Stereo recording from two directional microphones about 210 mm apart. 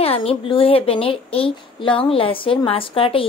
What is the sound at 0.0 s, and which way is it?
A woman's voice, 25° left (ahead or behind).